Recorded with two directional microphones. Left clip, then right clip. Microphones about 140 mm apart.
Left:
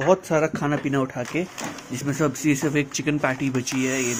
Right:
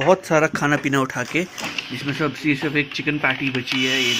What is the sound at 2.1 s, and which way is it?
Speech, 30° left (ahead or behind).